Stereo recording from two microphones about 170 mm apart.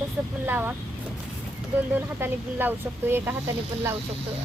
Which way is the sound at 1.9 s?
10° right (ahead or behind).